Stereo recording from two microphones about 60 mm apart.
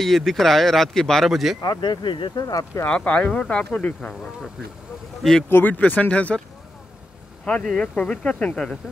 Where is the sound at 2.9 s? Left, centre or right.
Centre.